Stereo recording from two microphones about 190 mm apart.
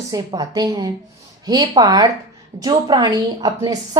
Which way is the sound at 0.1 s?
20° right (ahead or behind).